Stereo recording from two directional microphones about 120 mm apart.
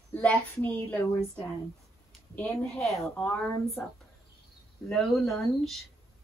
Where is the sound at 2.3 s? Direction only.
10° left (ahead or behind).